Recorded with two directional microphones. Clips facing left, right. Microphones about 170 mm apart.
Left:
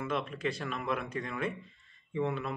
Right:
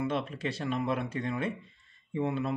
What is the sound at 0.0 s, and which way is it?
A man's voice, 30° right (ahead or behind).